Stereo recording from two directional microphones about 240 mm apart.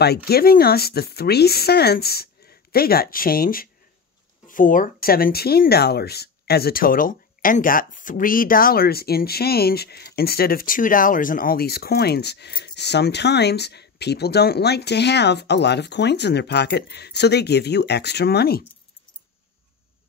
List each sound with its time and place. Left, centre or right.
0.3 s speech: left